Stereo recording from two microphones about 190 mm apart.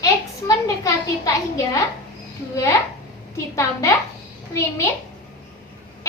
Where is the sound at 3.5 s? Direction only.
15° left (ahead or behind).